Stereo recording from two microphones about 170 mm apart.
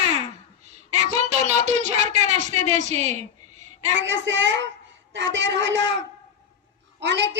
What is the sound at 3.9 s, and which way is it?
A woman's voice, 90° right.